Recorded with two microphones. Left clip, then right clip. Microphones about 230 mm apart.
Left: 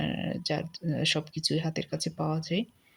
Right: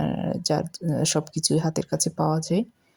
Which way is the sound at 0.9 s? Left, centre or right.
Right.